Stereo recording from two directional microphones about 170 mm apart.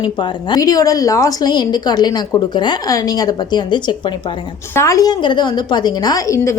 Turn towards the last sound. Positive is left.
turn(degrees=15)  # may be behind; listen again after turning